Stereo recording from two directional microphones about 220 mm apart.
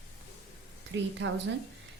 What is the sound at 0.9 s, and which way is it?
Speech, 55° right (ahead or behind).